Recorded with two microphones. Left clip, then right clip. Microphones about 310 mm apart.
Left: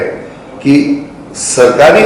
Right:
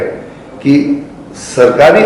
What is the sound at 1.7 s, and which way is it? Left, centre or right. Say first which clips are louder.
Speech: left 1 dB; centre.